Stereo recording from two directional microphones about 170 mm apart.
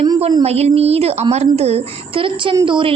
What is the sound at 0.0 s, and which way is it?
A woman's voice, 30° right (ahead or behind).